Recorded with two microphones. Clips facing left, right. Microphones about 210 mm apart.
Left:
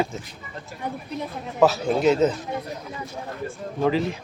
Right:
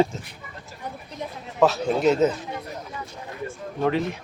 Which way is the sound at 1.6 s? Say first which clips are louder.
Left 1 dB; centre (ahead or behind).